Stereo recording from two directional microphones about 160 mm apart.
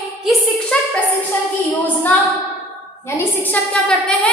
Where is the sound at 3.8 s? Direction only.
10° left (ahead or behind).